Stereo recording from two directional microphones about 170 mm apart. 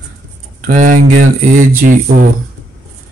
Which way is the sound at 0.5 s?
50° right (ahead or behind).